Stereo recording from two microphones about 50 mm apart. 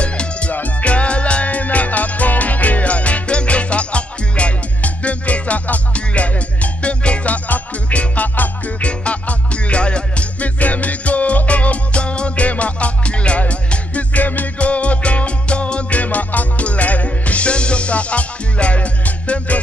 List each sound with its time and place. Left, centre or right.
0.0 s music: left